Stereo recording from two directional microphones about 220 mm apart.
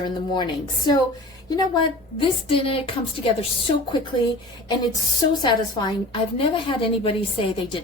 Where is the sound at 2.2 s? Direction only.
25° left (ahead or behind).